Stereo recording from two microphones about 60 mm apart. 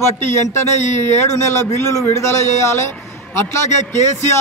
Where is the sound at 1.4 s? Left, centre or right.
Left.